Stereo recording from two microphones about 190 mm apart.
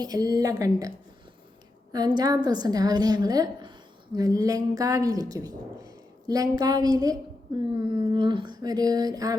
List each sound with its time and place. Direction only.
0.0 s a woman's voice: 20° right (ahead or behind)